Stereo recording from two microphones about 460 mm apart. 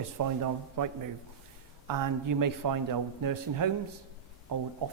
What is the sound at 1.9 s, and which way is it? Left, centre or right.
A man's voice, right.